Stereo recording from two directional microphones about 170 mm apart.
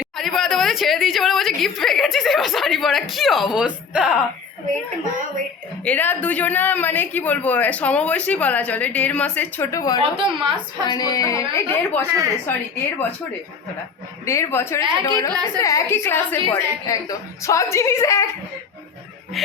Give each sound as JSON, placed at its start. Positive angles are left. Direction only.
{"t": 0.0, "sound": "speech", "side_deg": 0}
{"t": 5.8, "sound": "speech", "side_deg": 10}
{"t": 10.0, "sound": "a woman's voice", "side_deg": -30}
{"t": 10.8, "sound": "speech", "side_deg": 25}
{"t": 14.3, "sound": "speech", "side_deg": 15}